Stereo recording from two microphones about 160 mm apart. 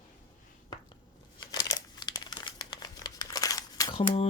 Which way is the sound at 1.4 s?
25° left (ahead or behind).